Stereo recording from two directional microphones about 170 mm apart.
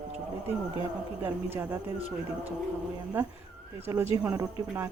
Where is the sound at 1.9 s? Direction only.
35° right (ahead or behind).